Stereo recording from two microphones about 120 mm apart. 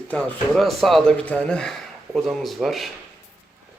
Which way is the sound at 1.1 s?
10° left (ahead or behind).